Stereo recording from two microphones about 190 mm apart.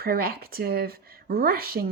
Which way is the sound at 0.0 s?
50° right (ahead or behind).